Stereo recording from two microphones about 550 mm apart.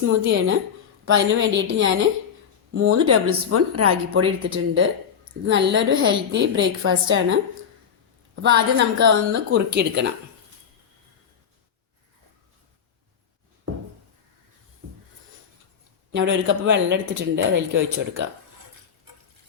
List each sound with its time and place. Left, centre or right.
0.0 s speech: right
8.4 s speech: centre
16.1 s speech: centre